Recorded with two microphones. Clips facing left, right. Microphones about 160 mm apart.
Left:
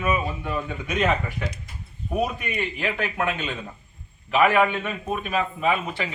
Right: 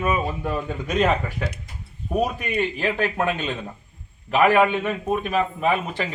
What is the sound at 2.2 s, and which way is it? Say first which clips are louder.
A man's voice: right 5 dB; 35° right (ahead or behind).